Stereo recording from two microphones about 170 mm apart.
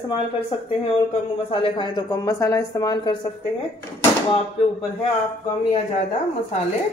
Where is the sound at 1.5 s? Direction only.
25° left (ahead or behind).